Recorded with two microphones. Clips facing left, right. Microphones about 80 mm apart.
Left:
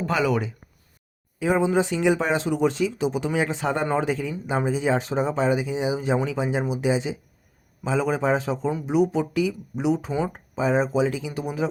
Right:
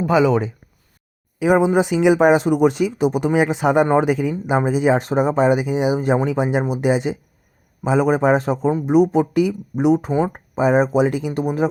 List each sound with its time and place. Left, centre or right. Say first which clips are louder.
0.0 s speech: right 7 dB; centre
1.4 s speech: right 6 dB; right
10.1 s speech: right 6 dB; right
10.6 s speech: right 6 dB; right